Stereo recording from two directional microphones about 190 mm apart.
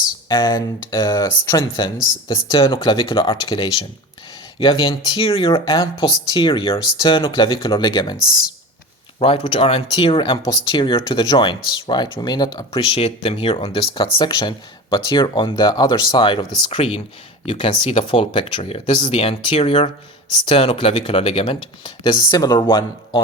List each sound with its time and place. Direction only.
0.3 s speech: 25° left (ahead or behind)
9.1 s speech: 30° left (ahead or behind)